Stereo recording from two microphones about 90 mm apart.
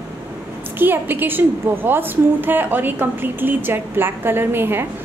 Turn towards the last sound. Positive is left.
turn(degrees=-25)  # may be behind; listen again after turning